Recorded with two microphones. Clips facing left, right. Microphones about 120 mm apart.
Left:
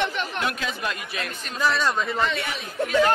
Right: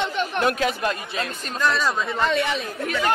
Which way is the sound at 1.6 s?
Centre (ahead or behind).